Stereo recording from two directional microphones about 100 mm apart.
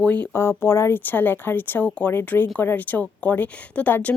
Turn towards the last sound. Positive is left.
turn(degrees=15)  # may be behind; listen again after turning